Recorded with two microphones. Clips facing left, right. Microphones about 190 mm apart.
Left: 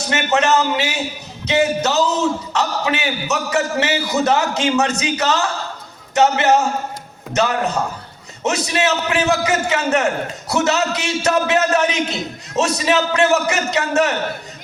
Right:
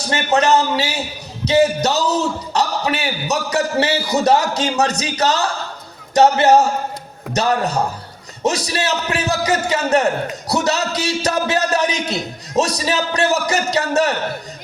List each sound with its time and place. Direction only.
0.1 s a man's voice: 35° right (ahead or behind)